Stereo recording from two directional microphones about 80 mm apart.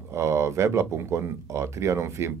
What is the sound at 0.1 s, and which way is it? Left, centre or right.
Speech, right.